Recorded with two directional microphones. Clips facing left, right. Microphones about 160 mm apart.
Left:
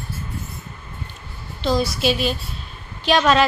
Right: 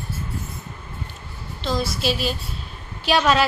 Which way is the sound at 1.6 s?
Centre (ahead or behind).